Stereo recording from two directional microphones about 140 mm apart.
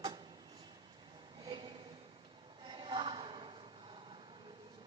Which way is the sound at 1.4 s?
35° right (ahead or behind).